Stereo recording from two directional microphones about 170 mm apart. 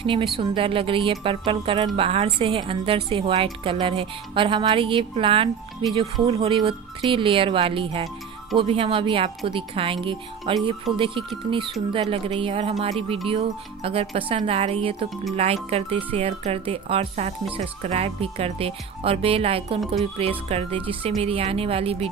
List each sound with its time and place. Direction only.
0.0 s speech: 30° right (ahead or behind)
10.9 s music: centre (ahead or behind)
11.9 s speech: 35° right (ahead or behind)